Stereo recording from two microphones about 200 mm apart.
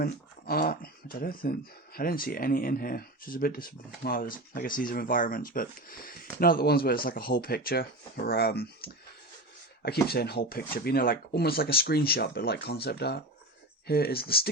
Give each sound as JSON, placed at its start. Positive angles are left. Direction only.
{"t": 0.0, "sound": "speech", "side_deg": 50}